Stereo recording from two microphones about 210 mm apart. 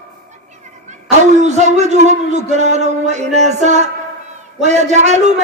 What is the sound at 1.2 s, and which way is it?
A man's voice, 35° right (ahead or behind).